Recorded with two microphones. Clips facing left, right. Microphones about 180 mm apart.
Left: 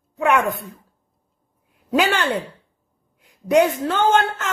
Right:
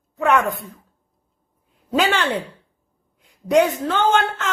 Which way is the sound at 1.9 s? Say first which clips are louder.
Even; 10° left (ahead or behind).